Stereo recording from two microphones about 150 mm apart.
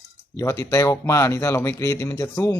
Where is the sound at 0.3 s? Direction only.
20° left (ahead or behind).